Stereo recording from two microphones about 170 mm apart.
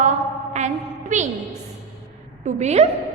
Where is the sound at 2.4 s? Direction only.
40° right (ahead or behind).